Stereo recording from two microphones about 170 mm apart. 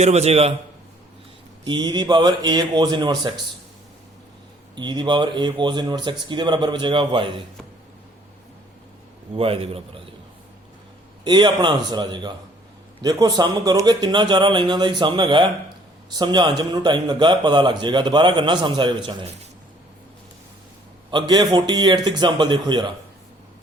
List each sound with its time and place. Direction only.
0.0 s a man's voice: 40° right (ahead or behind)
1.6 s a man's voice: 25° right (ahead or behind)
4.7 s a man's voice: 25° right (ahead or behind)
9.3 s a man's voice: 35° right (ahead or behind)
11.2 s a man's voice: 25° right (ahead or behind)
21.1 s a man's voice: 25° right (ahead or behind)